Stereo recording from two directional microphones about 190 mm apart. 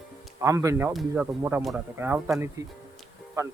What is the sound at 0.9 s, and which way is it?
Speech, 5° right (ahead or behind).